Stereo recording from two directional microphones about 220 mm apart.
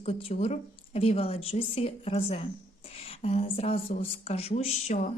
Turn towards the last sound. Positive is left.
turn(degrees=30)  # may be behind; listen again after turning